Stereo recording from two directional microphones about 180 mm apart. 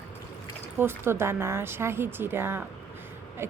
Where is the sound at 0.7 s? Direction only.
15° right (ahead or behind).